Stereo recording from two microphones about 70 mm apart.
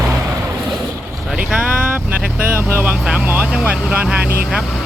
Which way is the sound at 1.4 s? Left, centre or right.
Centre.